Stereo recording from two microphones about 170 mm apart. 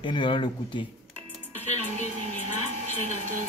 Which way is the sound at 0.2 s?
30° left (ahead or behind).